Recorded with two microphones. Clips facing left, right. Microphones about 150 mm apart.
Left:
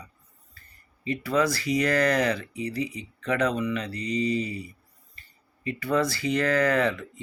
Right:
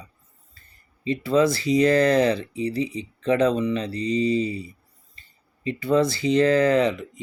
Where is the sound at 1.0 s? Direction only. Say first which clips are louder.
Right 5 dB; 25° right (ahead or behind).